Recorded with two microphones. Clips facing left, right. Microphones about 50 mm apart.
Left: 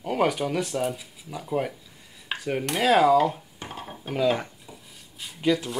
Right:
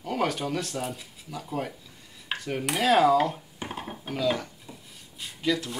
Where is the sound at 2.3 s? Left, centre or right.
Centre.